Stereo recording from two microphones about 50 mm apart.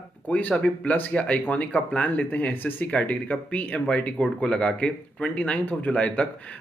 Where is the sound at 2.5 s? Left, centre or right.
Left.